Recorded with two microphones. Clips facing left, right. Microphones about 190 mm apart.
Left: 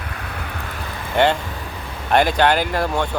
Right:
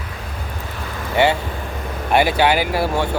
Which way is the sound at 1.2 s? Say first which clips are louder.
Even; 10° right (ahead or behind).